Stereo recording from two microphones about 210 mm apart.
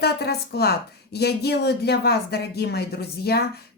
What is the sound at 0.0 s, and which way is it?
A woman's voice, 50° left (ahead or behind).